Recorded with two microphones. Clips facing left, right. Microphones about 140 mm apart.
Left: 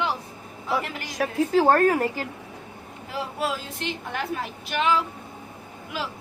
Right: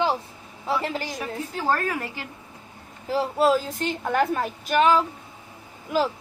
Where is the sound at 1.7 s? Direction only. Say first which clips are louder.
Left 6 dB; 50° left (ahead or behind).